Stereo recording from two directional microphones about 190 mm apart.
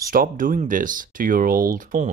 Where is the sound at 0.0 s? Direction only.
45° right (ahead or behind).